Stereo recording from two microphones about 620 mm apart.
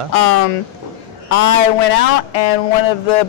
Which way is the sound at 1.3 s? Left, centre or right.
Left.